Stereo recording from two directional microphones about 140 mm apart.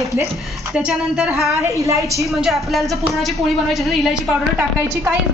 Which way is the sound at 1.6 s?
20° right (ahead or behind).